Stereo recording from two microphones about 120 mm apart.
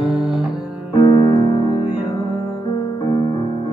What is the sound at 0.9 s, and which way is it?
Music, 35° left (ahead or behind).